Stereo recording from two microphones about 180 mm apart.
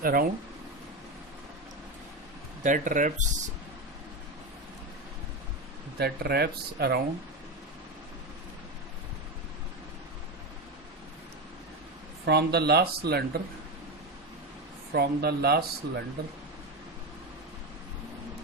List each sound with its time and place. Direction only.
0.0 s speech: 55° right (ahead or behind)
2.6 s speech: 45° right (ahead or behind)
6.0 s speech: 60° right (ahead or behind)
12.2 s speech: 65° right (ahead or behind)
14.9 s speech: 60° right (ahead or behind)